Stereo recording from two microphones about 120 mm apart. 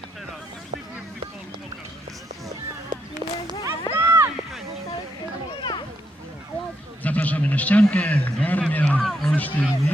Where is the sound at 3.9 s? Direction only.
20° right (ahead or behind).